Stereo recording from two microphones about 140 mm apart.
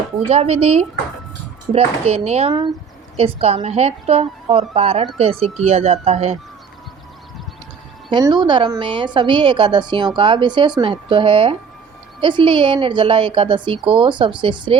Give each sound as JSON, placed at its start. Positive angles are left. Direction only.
{"t": 0.3, "sound": "a woman's voice", "side_deg": -45}
{"t": 8.1, "sound": "a woman's voice", "side_deg": -30}